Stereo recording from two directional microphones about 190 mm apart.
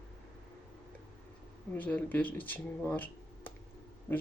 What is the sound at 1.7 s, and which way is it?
Speech, 10° left (ahead or behind).